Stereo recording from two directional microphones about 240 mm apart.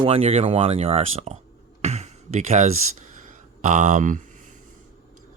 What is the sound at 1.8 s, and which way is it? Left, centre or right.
Music, right.